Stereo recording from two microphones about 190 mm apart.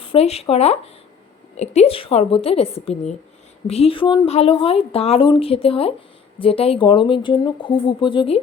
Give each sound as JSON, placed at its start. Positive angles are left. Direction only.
{"t": 0.0, "sound": "a woman's voice", "side_deg": 30}